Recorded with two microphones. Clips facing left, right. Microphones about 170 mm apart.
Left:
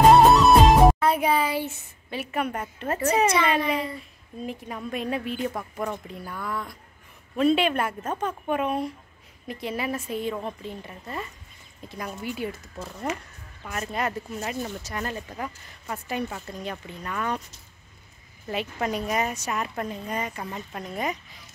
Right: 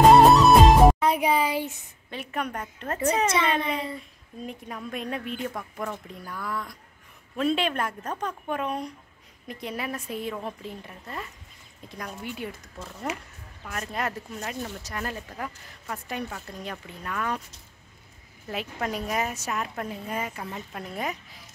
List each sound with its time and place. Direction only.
0.1 s music: centre (ahead or behind)
0.9 s speech: 15° right (ahead or behind)
2.0 s speech: 5° left (ahead or behind)
18.5 s speech: centre (ahead or behind)